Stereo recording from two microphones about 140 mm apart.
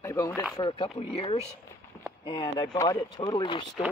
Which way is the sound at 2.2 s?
35° left (ahead or behind).